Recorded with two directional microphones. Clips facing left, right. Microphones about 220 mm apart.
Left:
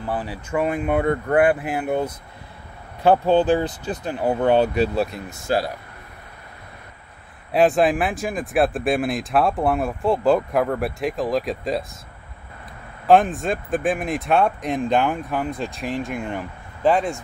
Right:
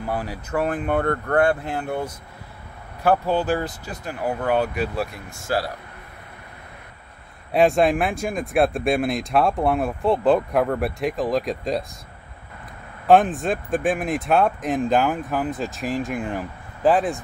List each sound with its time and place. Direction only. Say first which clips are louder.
0.1 s speech: left 1 dB; 10° right (ahead or behind)
0.5 s speech: left 2 dB; 5° left (ahead or behind); by 5.7 s 20° left (ahead or behind)
7.5 s speech: even; centre (ahead or behind)
13.0 s speech: even; centre (ahead or behind)